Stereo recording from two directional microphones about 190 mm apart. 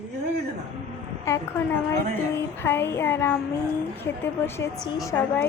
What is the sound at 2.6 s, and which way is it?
A woman's voice, 15° left (ahead or behind).